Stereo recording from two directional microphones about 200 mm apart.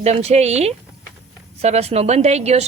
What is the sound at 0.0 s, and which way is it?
Speech, 30° right (ahead or behind).